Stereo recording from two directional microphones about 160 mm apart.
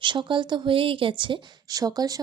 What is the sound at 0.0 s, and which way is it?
A woman's voice, 30° right (ahead or behind).